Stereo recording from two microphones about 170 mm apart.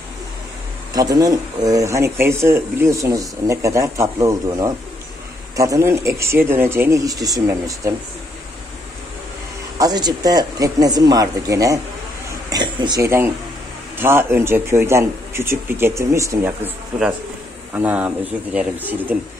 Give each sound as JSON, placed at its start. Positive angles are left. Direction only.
{"t": 0.9, "sound": "speech", "side_deg": -20}
{"t": 9.8, "sound": "speech", "side_deg": -25}
{"t": 12.4, "sound": "a sound", "side_deg": -25}
{"t": 13.9, "sound": "speech", "side_deg": -15}